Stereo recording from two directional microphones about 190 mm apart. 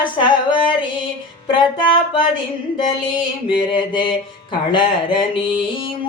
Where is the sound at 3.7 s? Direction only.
25° left (ahead or behind).